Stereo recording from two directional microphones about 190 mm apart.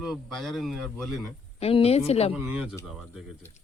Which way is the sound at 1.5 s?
30° left (ahead or behind).